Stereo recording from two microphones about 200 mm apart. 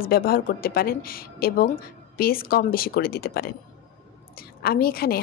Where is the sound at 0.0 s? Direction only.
50° left (ahead or behind).